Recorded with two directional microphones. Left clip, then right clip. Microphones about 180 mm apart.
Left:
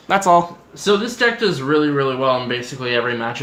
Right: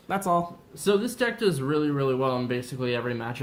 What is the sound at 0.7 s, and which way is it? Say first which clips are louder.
Speech: left 7 dB; 60° right (ahead or behind).